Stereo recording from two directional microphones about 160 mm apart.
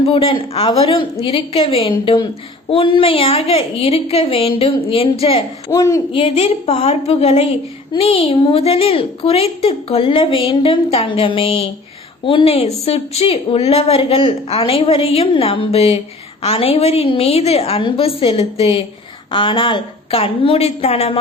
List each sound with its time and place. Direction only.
0.0 s a woman's voice: 35° left (ahead or behind)
5.7 s speech: 20° left (ahead or behind)
6.1 s a woman's voice: 35° left (ahead or behind)